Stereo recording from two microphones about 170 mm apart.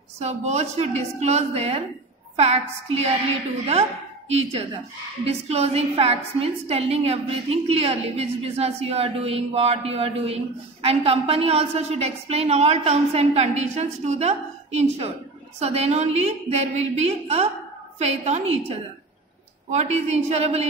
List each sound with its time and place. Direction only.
0.2 s a woman's voice: 40° right (ahead or behind)
4.3 s a woman's voice: 35° right (ahead or behind)
19.7 s a woman's voice: 40° right (ahead or behind)